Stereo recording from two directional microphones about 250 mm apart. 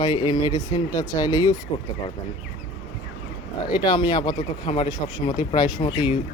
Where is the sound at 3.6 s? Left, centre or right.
Centre.